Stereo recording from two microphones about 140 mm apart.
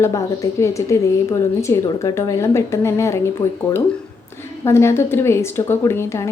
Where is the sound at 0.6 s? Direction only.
20° left (ahead or behind).